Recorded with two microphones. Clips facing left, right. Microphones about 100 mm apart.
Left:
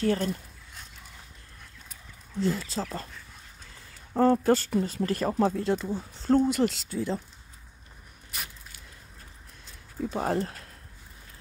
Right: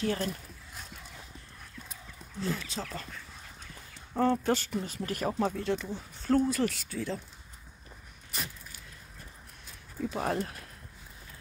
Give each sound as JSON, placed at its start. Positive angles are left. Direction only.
{"t": 0.0, "sound": "speech", "side_deg": 35}
{"t": 2.4, "sound": "speech", "side_deg": 35}
{"t": 4.2, "sound": "speech", "side_deg": 40}
{"t": 10.0, "sound": "speech", "side_deg": 30}